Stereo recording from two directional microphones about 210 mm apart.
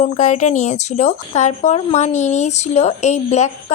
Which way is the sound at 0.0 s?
35° left (ahead or behind).